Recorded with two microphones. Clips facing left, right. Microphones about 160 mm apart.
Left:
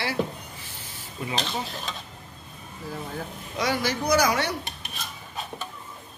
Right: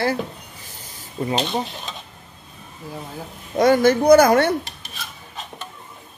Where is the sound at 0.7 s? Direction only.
45° right (ahead or behind).